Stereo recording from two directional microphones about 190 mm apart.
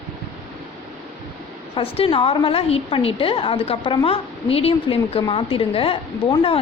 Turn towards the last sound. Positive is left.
turn(degrees=30)  # may be behind; listen again after turning